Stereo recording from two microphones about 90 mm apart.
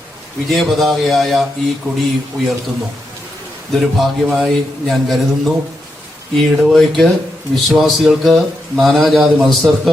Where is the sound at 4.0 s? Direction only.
Centre (ahead or behind).